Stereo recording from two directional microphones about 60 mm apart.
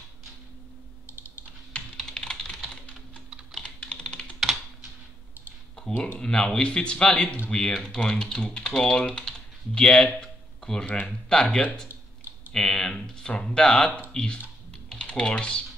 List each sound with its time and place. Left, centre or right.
2.0 s typing: centre
4.4 s computer keyboard: centre
6.1 s speech: centre